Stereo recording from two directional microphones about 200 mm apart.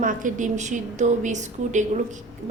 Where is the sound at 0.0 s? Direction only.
40° right (ahead or behind).